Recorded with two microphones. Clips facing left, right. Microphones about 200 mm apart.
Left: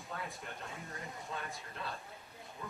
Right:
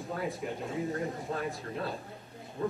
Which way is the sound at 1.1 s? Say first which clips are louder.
Right 9 dB; 35° right (ahead or behind).